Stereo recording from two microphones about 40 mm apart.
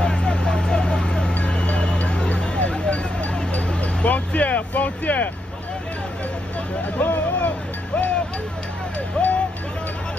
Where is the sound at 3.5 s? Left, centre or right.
Left.